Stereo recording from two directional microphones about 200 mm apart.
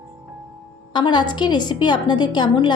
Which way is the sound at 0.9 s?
20° left (ahead or behind).